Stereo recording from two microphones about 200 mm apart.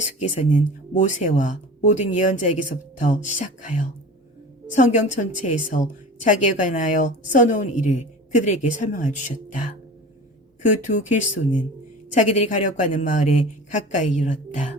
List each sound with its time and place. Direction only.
0.0 s speech: 35° left (ahead or behind)
10.8 s speech: 40° left (ahead or behind)